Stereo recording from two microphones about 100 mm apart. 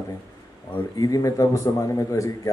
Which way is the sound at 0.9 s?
35° left (ahead or behind).